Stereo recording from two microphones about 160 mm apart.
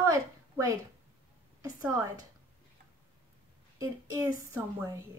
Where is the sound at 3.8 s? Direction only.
20° right (ahead or behind).